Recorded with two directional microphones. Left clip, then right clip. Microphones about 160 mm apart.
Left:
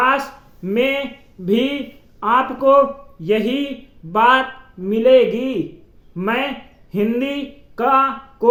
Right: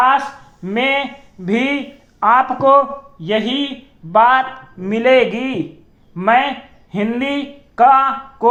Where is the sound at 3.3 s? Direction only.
15° left (ahead or behind).